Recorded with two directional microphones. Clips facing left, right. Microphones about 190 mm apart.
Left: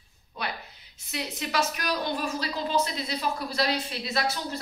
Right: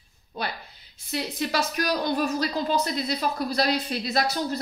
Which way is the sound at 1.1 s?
35° right (ahead or behind).